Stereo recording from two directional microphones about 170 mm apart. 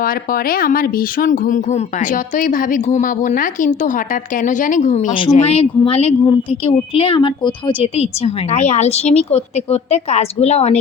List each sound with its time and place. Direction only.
0.0 s a woman's voice: 55° left (ahead or behind); by 10.8 s 40° left (ahead or behind)